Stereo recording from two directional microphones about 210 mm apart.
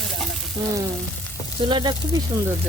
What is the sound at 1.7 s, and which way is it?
Speech, 20° right (ahead or behind).